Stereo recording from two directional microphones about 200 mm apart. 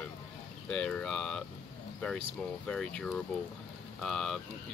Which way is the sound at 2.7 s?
5° left (ahead or behind).